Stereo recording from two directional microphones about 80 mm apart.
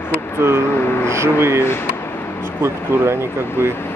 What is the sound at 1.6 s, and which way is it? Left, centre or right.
Speech, left.